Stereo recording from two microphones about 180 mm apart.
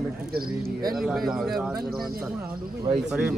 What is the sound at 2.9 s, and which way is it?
Speech, 35° right (ahead or behind).